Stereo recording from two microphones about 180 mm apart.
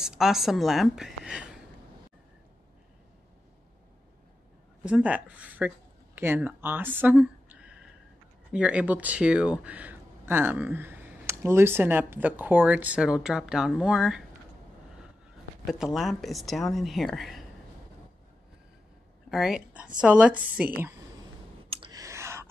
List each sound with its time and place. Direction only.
0.0 s speech: centre (ahead or behind)
4.8 s speech: 5° right (ahead or behind)
15.6 s speech: centre (ahead or behind)
19.3 s speech: 5° right (ahead or behind)
21.9 s a sound: 15° right (ahead or behind)